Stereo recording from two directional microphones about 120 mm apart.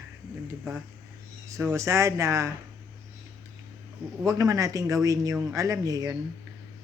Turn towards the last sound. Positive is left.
turn(degrees=-30)  # may be behind; listen again after turning